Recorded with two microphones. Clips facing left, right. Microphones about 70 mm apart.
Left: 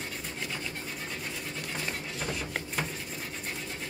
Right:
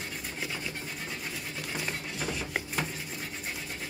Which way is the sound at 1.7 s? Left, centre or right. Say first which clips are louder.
Right 1 dB; centre.